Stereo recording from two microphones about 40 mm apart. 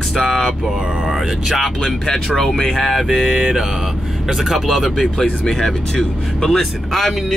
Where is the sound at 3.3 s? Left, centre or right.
Centre.